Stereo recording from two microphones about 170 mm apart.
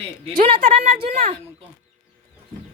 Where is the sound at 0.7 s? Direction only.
35° right (ahead or behind).